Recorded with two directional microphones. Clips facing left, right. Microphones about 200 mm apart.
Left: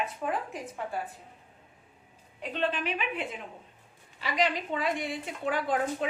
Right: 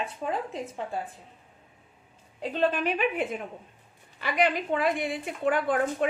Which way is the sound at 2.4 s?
35° right (ahead or behind).